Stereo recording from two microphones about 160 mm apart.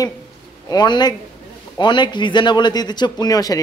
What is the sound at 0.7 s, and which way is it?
A man's voice, 25° left (ahead or behind).